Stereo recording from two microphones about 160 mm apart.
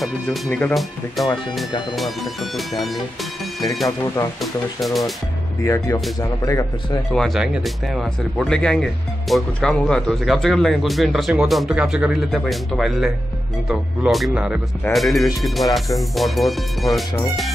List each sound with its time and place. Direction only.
0.0 s speech: 5° left (ahead or behind)
4.4 s speech: centre (ahead or behind)
5.6 s speech: 20° left (ahead or behind)
7.1 s speech: centre (ahead or behind)